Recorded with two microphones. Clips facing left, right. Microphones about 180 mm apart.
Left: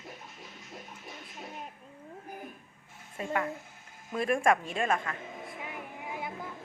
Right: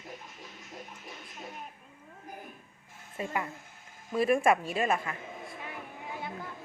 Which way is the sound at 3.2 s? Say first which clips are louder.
Left 2 dB; 5° right (ahead or behind).